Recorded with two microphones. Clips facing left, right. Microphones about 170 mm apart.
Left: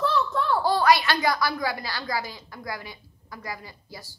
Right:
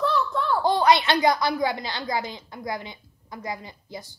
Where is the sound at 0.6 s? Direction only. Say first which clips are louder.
Right 2 dB; 20° right (ahead or behind).